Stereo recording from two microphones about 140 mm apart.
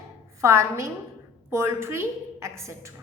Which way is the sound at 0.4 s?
20° right (ahead or behind).